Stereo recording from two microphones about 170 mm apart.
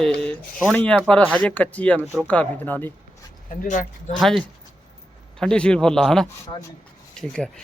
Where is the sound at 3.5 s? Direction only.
50° left (ahead or behind).